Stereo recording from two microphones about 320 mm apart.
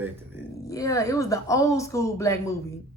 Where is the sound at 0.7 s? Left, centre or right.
Centre.